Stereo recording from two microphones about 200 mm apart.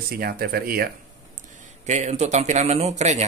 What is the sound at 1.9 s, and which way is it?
A man's voice, 35° right (ahead or behind).